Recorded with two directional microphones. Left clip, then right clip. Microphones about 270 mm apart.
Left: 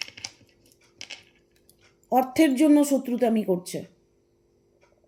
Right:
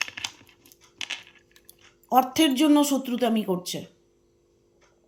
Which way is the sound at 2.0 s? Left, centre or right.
Right.